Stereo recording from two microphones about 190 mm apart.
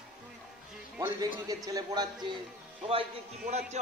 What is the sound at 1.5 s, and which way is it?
Speech, 20° right (ahead or behind).